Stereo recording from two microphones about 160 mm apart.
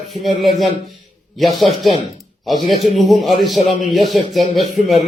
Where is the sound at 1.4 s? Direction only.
Centre (ahead or behind).